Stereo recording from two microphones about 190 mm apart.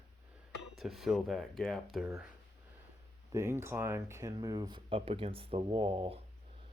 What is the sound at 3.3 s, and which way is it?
Speech, 15° right (ahead or behind).